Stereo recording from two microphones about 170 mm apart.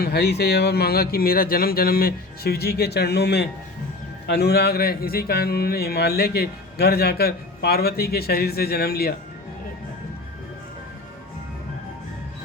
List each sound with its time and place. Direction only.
0.0 s speech: 70° left (ahead or behind)